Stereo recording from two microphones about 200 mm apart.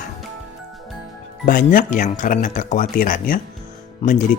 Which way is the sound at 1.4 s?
45° left (ahead or behind).